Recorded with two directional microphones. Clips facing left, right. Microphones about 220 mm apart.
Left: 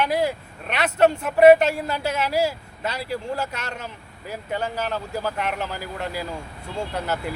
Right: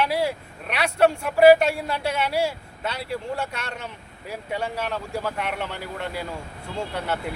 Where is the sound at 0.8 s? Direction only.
5° left (ahead or behind).